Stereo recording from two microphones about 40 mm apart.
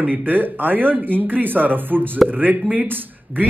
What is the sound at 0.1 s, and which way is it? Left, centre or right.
A man's voice, right.